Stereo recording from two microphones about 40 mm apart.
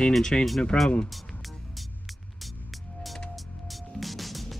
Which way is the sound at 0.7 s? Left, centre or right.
Left.